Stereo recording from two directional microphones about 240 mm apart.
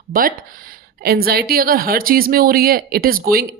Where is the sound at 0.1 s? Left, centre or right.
Right.